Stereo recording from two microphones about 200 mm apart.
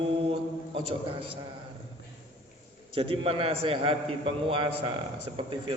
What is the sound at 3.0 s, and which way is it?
A man's voice, 30° right (ahead or behind).